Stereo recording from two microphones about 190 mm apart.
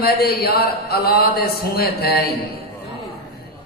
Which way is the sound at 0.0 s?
55° left (ahead or behind).